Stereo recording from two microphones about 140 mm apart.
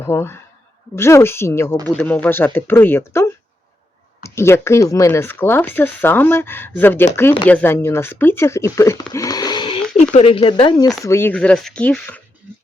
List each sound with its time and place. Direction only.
0.0 s speech: 15° left (ahead or behind)
9.1 s a sound: 25° left (ahead or behind)
10.1 s speech: 45° left (ahead or behind)
11.0 s speech: 15° left (ahead or behind)